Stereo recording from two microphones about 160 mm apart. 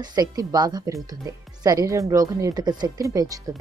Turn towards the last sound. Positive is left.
turn(degrees=-20)  # may be behind; listen again after turning